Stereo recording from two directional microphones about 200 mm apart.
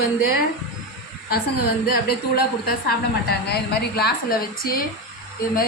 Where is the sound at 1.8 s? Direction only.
50° left (ahead or behind).